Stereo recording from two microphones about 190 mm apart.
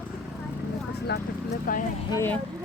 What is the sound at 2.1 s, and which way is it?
Speech, 15° left (ahead or behind).